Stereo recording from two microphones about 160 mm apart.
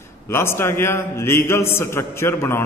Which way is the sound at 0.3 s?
15° left (ahead or behind).